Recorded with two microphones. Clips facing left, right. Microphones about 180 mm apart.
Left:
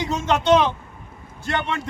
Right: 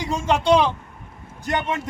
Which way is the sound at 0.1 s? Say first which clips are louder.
Even; 10° right (ahead or behind).